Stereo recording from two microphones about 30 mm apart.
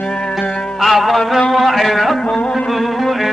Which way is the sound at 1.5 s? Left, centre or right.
Centre.